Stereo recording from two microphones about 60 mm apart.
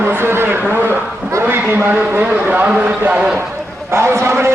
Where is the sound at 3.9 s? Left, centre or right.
Right.